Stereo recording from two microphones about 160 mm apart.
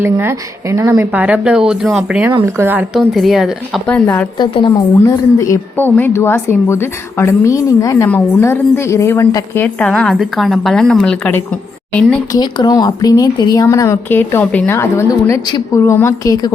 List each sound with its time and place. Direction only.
0.0 s speech: 15° right (ahead or behind)
3.1 s a woman's voice: centre (ahead or behind)
4.4 s a woman's voice: 30° left (ahead or behind); by 11.4 s 10° left (ahead or behind)
12.3 s speech: 25° left (ahead or behind)